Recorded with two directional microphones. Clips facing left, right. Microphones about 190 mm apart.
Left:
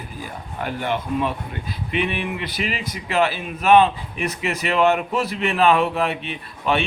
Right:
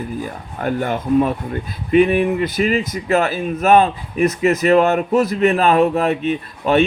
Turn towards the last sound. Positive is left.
turn(degrees=-45)  # may be behind; listen again after turning